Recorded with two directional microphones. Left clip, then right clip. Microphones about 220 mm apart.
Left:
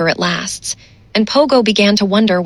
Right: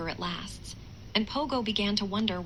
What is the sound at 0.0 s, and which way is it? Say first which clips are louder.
Speech: left 19 dB; 50° left (ahead or behind).